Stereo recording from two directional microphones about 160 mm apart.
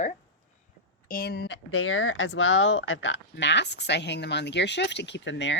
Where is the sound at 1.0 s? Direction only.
70° left (ahead or behind); by 1.6 s 85° left.